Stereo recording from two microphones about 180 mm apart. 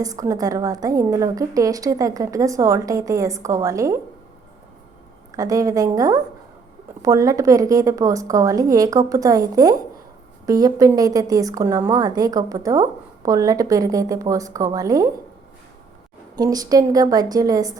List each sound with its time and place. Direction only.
0.0 s a woman's voice: 20° right (ahead or behind)
5.3 s a woman's voice: 20° right (ahead or behind)
16.3 s a woman's voice: 20° right (ahead or behind)